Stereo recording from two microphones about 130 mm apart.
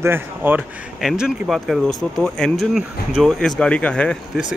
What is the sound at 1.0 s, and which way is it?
Speech, 5° right (ahead or behind).